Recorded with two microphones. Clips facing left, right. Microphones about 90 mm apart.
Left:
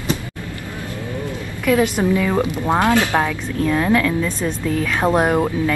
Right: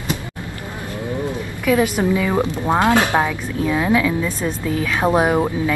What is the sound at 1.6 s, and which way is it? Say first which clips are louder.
Speech: even; 5° right (ahead or behind).